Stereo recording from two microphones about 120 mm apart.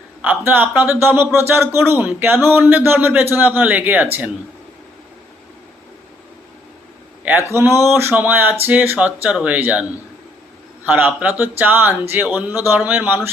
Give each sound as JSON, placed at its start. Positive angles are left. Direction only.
{"t": 0.2, "sound": "speech", "side_deg": -15}
{"t": 1.4, "sound": "a sound", "side_deg": -20}
{"t": 3.3, "sound": "speech", "side_deg": -15}
{"t": 7.5, "sound": "a sound", "side_deg": -20}
{"t": 7.9, "sound": "speech", "side_deg": -20}
{"t": 10.8, "sound": "speech", "side_deg": -15}